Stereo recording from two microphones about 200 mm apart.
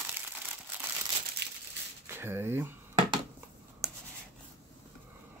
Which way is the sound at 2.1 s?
10° right (ahead or behind).